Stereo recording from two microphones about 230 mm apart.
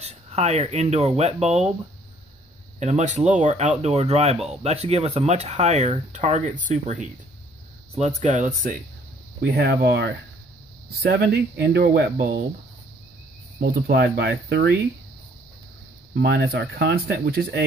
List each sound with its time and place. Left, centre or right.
0.0 s speech: right
2.8 s speech: right
9.4 s speech: right
13.6 s speech: right
16.2 s speech: right